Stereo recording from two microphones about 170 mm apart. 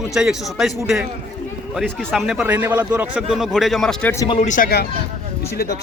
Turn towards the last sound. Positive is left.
turn(degrees=65)  # may be behind; listen again after turning